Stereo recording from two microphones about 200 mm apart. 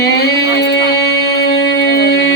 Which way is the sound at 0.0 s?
55° left (ahead or behind).